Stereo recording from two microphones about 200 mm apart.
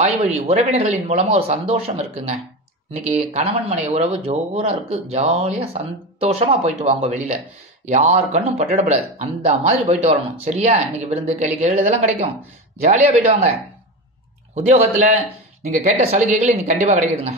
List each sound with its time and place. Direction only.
0.4 s speech: 30° right (ahead or behind)
3.3 s speech: 30° right (ahead or behind)
15.0 s speech: 35° right (ahead or behind)